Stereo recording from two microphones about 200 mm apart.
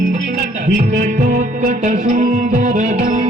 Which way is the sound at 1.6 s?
35° right (ahead or behind).